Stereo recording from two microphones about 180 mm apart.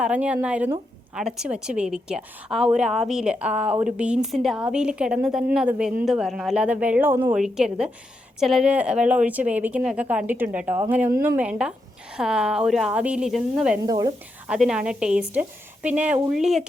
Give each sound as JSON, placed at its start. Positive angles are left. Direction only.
{"t": 0.0, "sound": "a woman's voice", "side_deg": -5}
{"t": 13.8, "sound": "speech", "side_deg": -20}
{"t": 14.4, "sound": "a woman's voice", "side_deg": -5}